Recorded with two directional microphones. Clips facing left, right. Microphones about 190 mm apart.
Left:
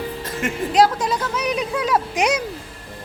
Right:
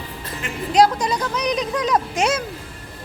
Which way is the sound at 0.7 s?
Centre (ahead or behind).